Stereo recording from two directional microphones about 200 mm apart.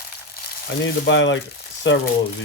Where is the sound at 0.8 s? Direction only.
65° left (ahead or behind).